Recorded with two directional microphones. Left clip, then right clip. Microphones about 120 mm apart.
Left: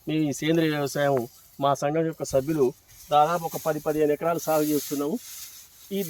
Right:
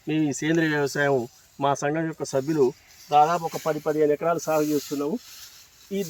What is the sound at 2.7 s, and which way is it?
Speech, 30° left (ahead or behind).